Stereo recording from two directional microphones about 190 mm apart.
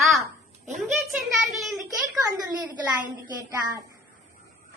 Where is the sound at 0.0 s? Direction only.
Centre (ahead or behind).